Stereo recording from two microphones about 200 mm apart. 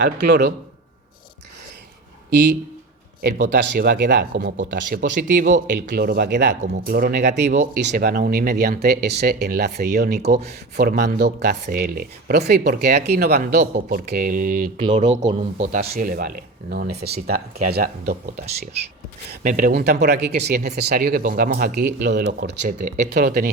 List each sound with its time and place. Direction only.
3.2 s speech: 50° right (ahead or behind)
6.6 s speech: 50° right (ahead or behind)
13.6 s speech: 40° right (ahead or behind)
15.2 s speech: 20° right (ahead or behind)
15.5 s speech: 45° right (ahead or behind)
19.3 s speech: 45° right (ahead or behind); by 22.4 s 60° right (ahead or behind)
22.6 s speech: 40° right (ahead or behind)